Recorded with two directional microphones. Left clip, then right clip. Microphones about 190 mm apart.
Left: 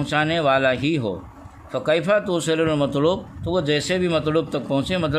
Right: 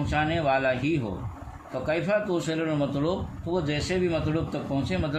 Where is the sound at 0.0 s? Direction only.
60° left (ahead or behind).